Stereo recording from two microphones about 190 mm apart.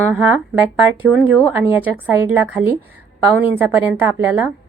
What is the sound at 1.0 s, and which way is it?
A woman's voice, 5° right (ahead or behind).